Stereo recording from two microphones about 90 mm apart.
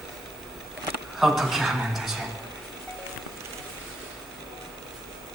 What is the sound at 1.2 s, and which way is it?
A man's voice, 5° right (ahead or behind).